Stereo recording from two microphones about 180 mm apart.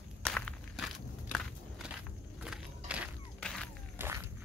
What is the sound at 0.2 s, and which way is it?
Walk, 5° left (ahead or behind).